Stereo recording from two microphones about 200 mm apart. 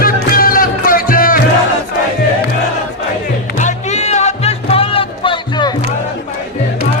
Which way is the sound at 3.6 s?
35° left (ahead or behind).